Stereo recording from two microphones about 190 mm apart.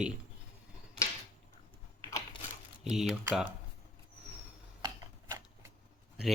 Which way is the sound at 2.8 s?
Centre (ahead or behind).